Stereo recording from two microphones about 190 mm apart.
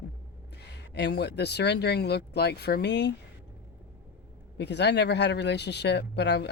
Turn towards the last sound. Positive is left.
turn(degrees=60)  # may be behind; listen again after turning